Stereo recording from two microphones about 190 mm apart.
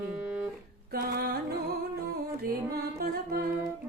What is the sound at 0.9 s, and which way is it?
Music, 55° right (ahead or behind).